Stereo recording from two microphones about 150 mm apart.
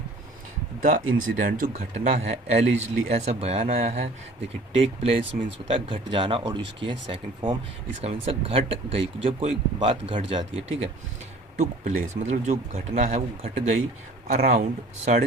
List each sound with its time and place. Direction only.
1.5 s speech: 65° right (ahead or behind)
1.7 s speech: 45° right (ahead or behind)